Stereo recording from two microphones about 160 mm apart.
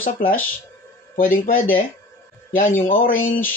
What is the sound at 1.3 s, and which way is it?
Speech, 60° left (ahead or behind).